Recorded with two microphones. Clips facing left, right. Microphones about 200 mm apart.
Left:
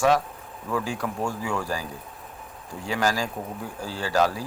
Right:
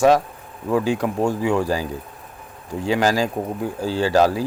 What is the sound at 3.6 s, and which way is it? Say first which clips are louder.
Speech: right 13 dB; 75° right (ahead or behind).